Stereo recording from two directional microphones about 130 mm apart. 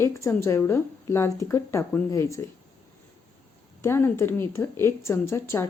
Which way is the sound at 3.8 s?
20° left (ahead or behind).